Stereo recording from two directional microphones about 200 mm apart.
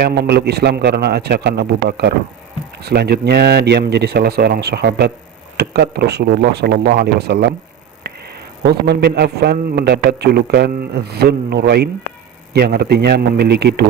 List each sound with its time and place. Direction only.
0.0 s a man's voice: 55° right (ahead or behind)
8.1 s a sound: 55° right (ahead or behind)
8.6 s a man's voice: 55° right (ahead or behind)